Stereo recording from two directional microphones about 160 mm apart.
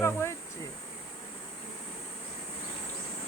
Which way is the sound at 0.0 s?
15° left (ahead or behind).